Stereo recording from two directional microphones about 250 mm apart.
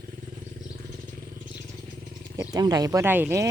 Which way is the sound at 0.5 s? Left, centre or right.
Right.